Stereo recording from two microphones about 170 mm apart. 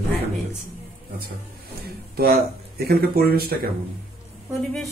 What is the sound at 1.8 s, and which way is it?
A man's voice, 65° right (ahead or behind).